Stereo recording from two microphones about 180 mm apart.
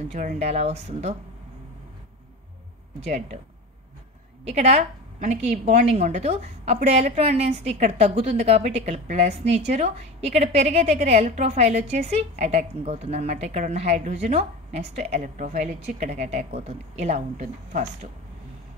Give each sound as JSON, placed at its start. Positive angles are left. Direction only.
{"t": 0.1, "sound": "a woman's voice", "side_deg": -40}
{"t": 4.5, "sound": "a woman's voice", "side_deg": -35}